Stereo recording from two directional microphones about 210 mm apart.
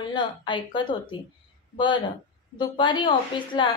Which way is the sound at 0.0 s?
20° left (ahead or behind).